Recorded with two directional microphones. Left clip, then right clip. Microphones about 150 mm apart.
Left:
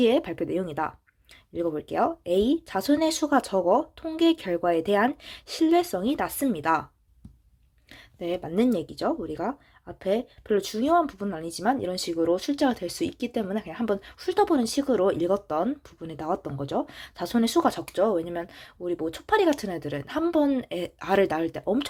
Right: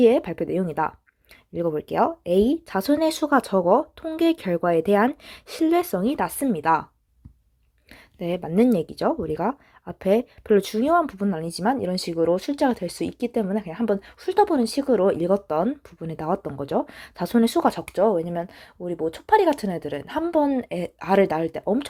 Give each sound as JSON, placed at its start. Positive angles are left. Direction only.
{"t": 0.0, "sound": "speech", "side_deg": -35}
{"t": 7.9, "sound": "speech", "side_deg": -40}